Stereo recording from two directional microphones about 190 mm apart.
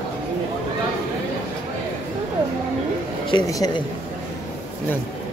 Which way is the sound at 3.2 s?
20° left (ahead or behind).